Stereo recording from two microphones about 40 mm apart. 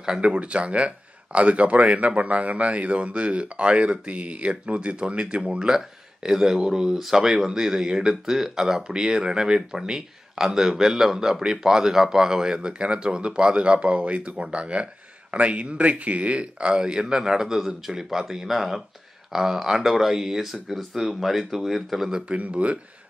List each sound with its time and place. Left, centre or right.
0.2 s speech: right
5.8 s speech: centre
22.3 s speech: right